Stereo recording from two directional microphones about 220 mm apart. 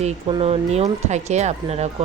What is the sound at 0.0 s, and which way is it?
Speech, 25° right (ahead or behind).